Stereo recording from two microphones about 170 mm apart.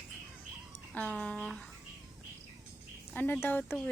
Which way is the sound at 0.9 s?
5° left (ahead or behind).